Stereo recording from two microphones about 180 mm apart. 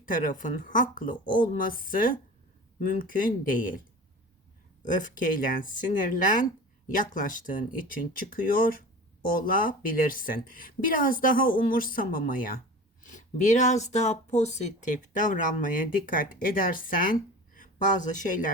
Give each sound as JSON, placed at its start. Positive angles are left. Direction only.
{"t": 0.0, "sound": "speech", "side_deg": 50}
{"t": 4.8, "sound": "speech", "side_deg": 45}